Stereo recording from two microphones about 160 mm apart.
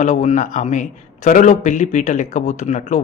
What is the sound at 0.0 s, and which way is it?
A man's voice, 45° left (ahead or behind).